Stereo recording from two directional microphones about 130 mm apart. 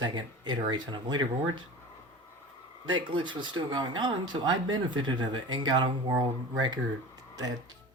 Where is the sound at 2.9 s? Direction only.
40° right (ahead or behind).